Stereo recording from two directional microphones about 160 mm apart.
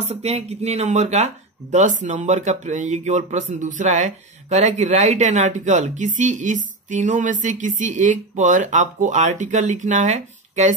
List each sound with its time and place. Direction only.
0.0 s speech: 40° right (ahead or behind)